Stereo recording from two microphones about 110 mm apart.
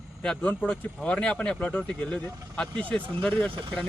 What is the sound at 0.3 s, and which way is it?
Speech, 10° left (ahead or behind).